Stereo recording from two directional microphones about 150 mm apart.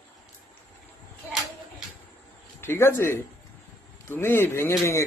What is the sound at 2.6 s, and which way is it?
Speech, 15° left (ahead or behind).